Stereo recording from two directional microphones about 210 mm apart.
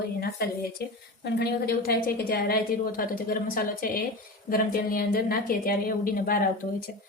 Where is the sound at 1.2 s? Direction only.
50° left (ahead or behind).